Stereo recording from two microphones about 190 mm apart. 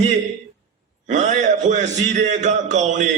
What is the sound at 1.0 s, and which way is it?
A man's voice, 40° right (ahead or behind).